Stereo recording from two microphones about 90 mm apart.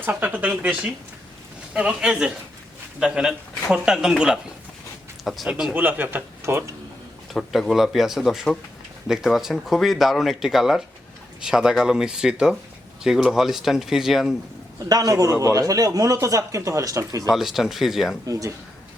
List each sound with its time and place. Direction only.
0.0 s speech: 20° right (ahead or behind)
5.2 s speech: centre (ahead or behind)
5.7 s speech: 20° right (ahead or behind)
7.3 s speech: centre (ahead or behind)
14.8 s a man's voice: 45° right (ahead or behind)
17.3 s speech: 5° right (ahead or behind)
18.3 s a man's voice: 40° right (ahead or behind)